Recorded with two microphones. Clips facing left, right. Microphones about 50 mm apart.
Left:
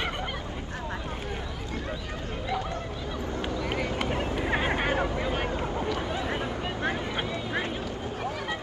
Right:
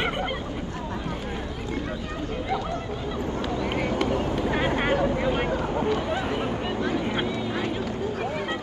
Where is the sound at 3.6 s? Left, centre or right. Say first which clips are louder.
Right 4 dB; right.